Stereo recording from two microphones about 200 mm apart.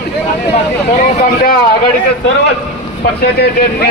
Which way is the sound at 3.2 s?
50° left (ahead or behind).